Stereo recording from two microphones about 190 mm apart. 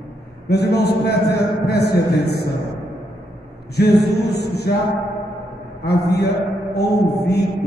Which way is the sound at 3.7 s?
60° left (ahead or behind).